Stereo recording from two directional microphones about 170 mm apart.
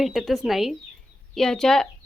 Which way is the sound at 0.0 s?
Centre (ahead or behind).